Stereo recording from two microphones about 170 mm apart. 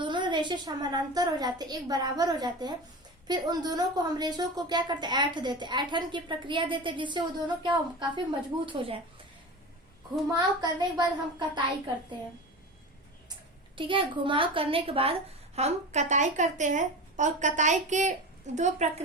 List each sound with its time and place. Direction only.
0.0 s a woman's voice: 25° right (ahead or behind)
10.3 s a woman's voice: 25° right (ahead or behind)
13.7 s a woman's voice: 30° right (ahead or behind)